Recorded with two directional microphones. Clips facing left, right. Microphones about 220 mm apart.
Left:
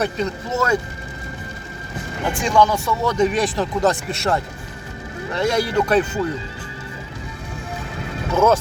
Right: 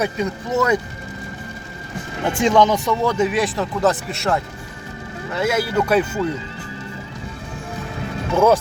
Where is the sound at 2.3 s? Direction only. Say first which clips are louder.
Right 2 dB; 20° right (ahead or behind).